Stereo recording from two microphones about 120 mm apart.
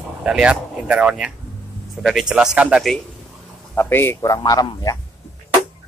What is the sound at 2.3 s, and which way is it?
Speech, 10° right (ahead or behind).